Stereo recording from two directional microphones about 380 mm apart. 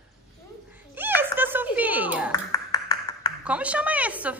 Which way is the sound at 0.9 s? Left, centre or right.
Centre.